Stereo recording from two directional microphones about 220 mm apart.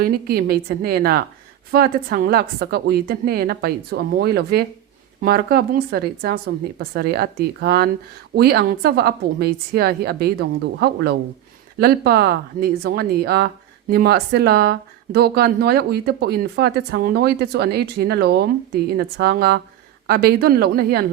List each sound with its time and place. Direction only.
0.0 s speech: 45° right (ahead or behind)